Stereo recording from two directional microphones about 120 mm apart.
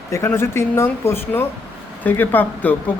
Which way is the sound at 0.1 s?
20° left (ahead or behind).